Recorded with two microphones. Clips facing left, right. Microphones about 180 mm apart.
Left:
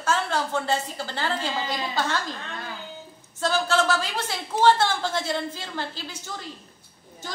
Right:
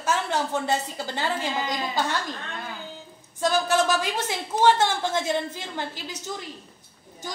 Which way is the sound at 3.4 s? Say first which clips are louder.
Right 1 dB; 15° right (ahead or behind).